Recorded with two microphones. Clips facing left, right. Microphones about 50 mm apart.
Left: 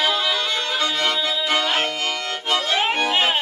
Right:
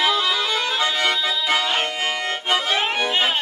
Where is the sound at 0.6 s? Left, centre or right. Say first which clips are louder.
Right 1 dB; centre.